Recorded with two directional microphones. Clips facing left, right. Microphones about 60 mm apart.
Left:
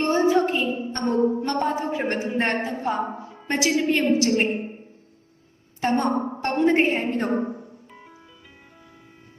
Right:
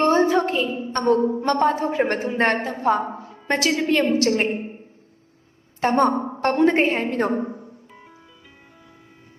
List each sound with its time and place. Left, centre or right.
0.0 s a woman's voice: right
5.8 s a woman's voice: right